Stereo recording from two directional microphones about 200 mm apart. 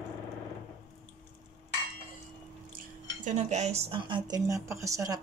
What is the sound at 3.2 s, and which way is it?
A woman's voice, 40° right (ahead or behind).